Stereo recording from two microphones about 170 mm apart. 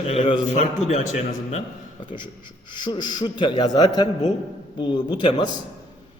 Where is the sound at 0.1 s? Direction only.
35° left (ahead or behind).